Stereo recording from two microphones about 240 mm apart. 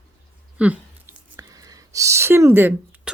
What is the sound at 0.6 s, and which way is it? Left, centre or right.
Speech, centre.